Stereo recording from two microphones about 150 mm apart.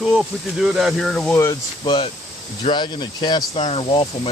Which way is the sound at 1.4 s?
25° left (ahead or behind).